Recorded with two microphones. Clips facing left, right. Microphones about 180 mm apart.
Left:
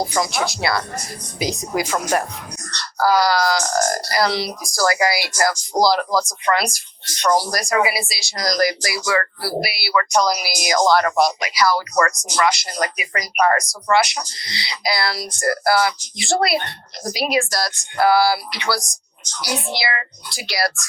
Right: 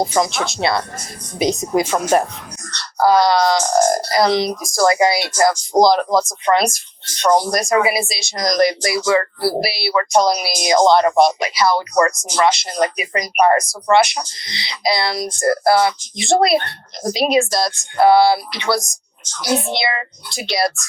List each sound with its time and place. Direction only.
0.0 s speech: 20° right (ahead or behind)